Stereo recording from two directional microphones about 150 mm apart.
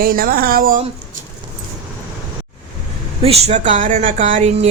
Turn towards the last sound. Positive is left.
turn(degrees=-55)  # may be behind; listen again after turning